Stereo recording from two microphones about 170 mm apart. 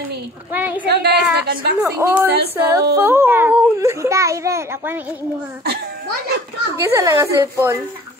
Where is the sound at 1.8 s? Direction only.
15° right (ahead or behind).